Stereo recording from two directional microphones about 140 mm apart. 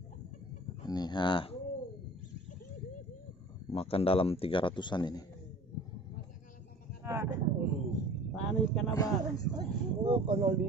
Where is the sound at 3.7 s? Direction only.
45° left (ahead or behind).